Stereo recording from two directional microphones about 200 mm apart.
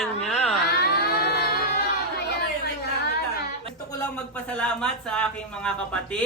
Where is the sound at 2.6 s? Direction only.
55° left (ahead or behind).